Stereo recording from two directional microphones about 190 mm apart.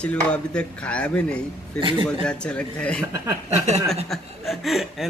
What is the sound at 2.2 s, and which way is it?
Speech, 5° left (ahead or behind).